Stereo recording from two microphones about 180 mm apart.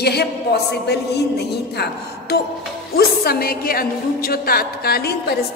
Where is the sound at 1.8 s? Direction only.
60° left (ahead or behind).